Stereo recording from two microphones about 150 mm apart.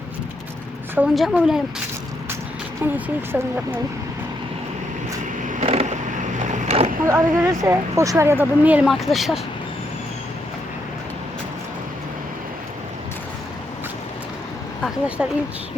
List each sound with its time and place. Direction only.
0.9 s a woman's voice: 5° right (ahead or behind)
2.8 s speech: 15° right (ahead or behind)
5.6 s vehicle: 45° right (ahead or behind)
7.1 s speech: 20° right (ahead or behind); by 9.4 s centre (ahead or behind)
15.2 s a woman's voice: 5° right (ahead or behind)